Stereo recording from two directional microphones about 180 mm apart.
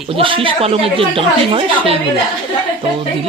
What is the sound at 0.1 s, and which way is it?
Speech, 30° right (ahead or behind).